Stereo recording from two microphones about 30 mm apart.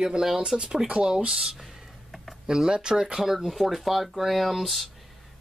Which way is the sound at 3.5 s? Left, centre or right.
Centre.